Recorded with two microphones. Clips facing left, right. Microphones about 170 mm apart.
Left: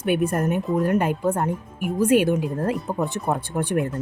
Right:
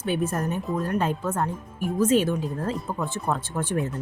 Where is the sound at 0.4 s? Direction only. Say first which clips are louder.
Left 6 dB; 15° left (ahead or behind).